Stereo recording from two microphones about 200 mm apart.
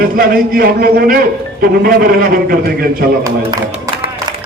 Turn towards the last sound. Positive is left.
turn(degrees=-45)  # may be behind; listen again after turning